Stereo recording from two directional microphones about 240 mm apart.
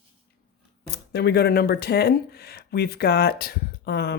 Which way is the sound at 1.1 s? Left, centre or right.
Left.